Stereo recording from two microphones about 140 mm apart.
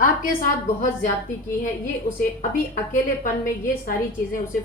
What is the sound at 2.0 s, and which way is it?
Speech, 70° left (ahead or behind).